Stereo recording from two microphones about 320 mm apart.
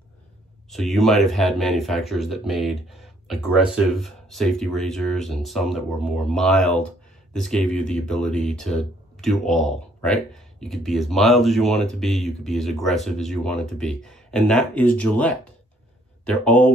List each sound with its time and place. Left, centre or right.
0.9 s speech: centre